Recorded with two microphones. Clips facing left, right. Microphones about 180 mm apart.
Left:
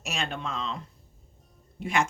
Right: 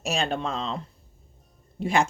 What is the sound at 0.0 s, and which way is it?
Speech, 35° right (ahead or behind).